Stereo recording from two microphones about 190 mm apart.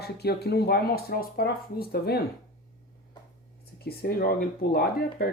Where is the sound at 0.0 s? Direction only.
55° left (ahead or behind).